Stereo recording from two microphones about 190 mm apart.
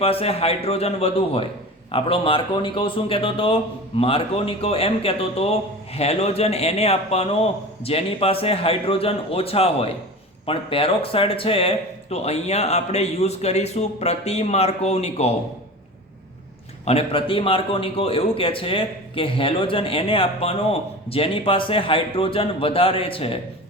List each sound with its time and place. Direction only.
0.0 s a man's voice: 30° left (ahead or behind)
16.8 s a man's voice: 30° left (ahead or behind)